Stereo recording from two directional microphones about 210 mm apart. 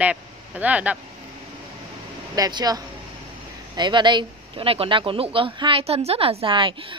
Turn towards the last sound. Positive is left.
turn(degrees=-25)  # may be behind; listen again after turning